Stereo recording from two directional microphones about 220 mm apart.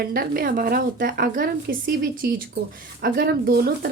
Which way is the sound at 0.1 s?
40° right (ahead or behind).